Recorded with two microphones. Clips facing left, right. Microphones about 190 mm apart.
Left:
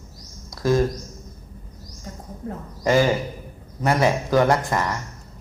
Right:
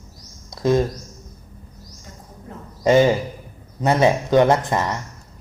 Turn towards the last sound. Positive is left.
turn(degrees=-20)  # may be behind; listen again after turning